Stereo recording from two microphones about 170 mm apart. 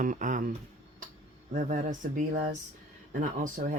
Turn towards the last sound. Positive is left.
turn(degrees=-55)  # may be behind; listen again after turning